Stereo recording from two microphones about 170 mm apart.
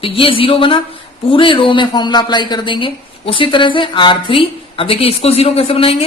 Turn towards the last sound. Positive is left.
turn(degrees=35)  # may be behind; listen again after turning